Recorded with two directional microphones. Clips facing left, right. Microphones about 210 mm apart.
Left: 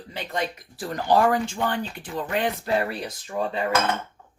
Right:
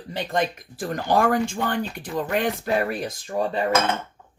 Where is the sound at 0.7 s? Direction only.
50° right (ahead or behind).